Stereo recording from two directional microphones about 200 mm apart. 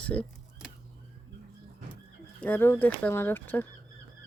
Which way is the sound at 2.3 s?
10° left (ahead or behind).